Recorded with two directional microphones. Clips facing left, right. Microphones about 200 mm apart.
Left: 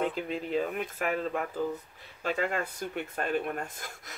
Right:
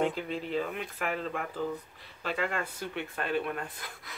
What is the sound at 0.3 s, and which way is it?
Speech, 45° left (ahead or behind).